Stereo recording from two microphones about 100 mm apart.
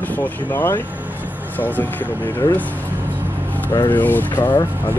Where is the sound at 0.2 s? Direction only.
20° left (ahead or behind).